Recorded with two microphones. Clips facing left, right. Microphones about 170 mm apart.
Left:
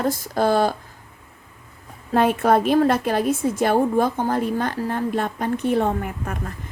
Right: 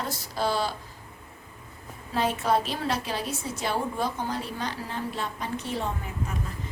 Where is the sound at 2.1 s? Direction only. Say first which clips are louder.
Left 8 dB; 55° left (ahead or behind).